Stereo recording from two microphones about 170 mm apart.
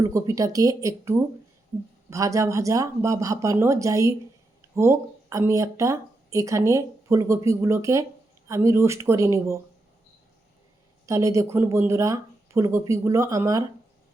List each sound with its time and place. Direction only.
0.0 s speech: 20° right (ahead or behind)
11.0 s speech: 20° right (ahead or behind)